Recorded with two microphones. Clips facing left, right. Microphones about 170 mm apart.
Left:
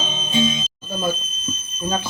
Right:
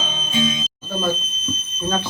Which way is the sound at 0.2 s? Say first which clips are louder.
Left 2 dB; 25° left (ahead or behind).